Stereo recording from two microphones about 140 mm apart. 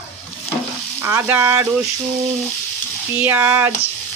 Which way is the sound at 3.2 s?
15° right (ahead or behind).